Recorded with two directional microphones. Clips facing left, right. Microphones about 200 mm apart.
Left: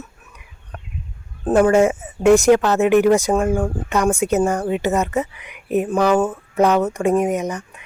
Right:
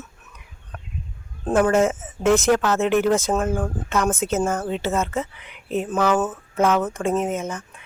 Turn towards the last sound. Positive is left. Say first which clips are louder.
# left 5 dB
turn(degrees=15)  # may be behind; listen again after turning